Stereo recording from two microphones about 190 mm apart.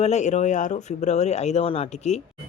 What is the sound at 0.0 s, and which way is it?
Speech, 35° left (ahead or behind).